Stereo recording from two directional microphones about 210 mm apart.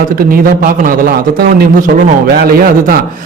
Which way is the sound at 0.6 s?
40° right (ahead or behind).